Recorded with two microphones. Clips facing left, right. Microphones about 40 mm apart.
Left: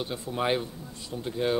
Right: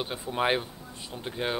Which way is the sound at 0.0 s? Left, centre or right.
Right.